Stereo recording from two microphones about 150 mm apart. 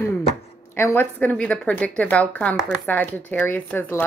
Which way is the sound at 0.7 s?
15° left (ahead or behind).